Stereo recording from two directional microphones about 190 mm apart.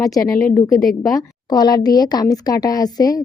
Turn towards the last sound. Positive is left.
turn(degrees=20)  # may be behind; listen again after turning